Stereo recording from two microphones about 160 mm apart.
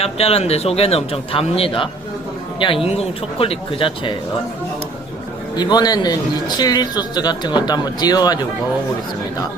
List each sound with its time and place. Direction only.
0.0 s speech: 40° left (ahead or behind)
5.5 s speech: 25° left (ahead or behind)